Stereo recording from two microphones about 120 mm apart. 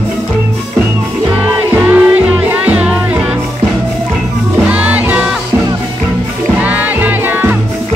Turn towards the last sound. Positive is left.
turn(degrees=-15)  # may be behind; listen again after turning